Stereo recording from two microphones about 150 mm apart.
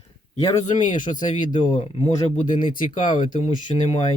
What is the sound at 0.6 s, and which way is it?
Speech, 55° left (ahead or behind).